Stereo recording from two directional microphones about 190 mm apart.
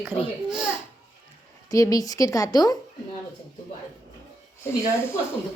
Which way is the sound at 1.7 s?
20° left (ahead or behind).